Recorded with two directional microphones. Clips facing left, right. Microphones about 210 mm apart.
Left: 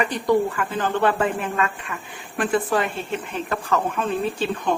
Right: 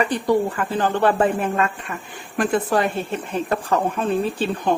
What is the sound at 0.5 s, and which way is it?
A woman's voice, 35° right (ahead or behind).